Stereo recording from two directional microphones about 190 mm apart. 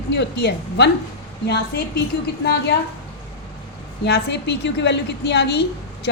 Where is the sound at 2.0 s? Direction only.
60° left (ahead or behind).